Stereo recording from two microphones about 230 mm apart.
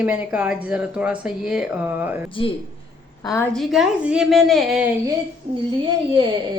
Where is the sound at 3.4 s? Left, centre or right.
Centre.